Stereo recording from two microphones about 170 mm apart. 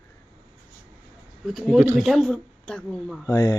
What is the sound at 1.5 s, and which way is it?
A woman's voice, centre (ahead or behind).